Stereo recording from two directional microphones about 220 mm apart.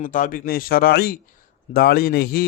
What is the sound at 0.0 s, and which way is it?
A man's voice, 35° left (ahead or behind).